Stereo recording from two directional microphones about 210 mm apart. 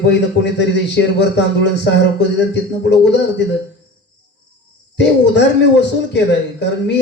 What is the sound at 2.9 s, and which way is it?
Speech, 55° left (ahead or behind).